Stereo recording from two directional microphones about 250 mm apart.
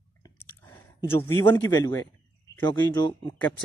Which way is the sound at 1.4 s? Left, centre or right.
Centre.